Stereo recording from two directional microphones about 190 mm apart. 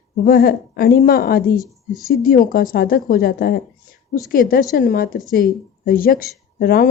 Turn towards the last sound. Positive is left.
turn(degrees=50)  # may be behind; listen again after turning